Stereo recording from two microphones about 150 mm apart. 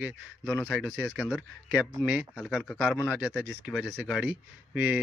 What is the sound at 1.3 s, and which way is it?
Speech, centre (ahead or behind).